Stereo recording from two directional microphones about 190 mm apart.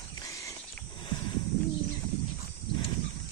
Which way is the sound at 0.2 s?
15° left (ahead or behind).